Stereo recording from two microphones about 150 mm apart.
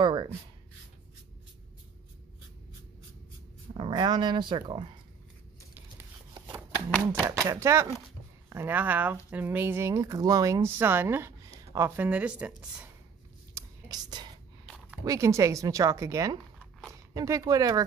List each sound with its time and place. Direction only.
0.0 s writing: 30° right (ahead or behind)
3.7 s speech: 35° right (ahead or behind)
7.4 s speech: 20° right (ahead or behind)
13.6 s whispering: 25° right (ahead or behind)
15.0 s speech: 20° right (ahead or behind)